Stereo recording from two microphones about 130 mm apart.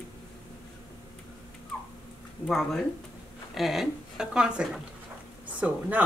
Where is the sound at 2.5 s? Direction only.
5° left (ahead or behind).